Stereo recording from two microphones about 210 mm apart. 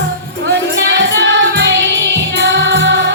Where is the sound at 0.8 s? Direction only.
55° right (ahead or behind).